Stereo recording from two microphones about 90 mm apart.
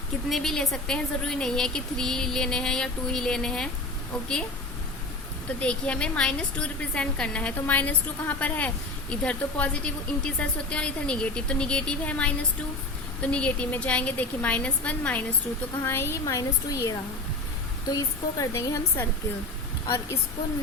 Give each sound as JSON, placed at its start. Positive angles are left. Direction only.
{"t": 0.3, "sound": "a woman's voice", "side_deg": 5}
{"t": 5.5, "sound": "a woman's voice", "side_deg": 15}
{"t": 13.3, "sound": "a woman's voice", "side_deg": 15}
{"t": 15.8, "sound": "speech", "side_deg": 25}
{"t": 16.2, "sound": "speech", "side_deg": 40}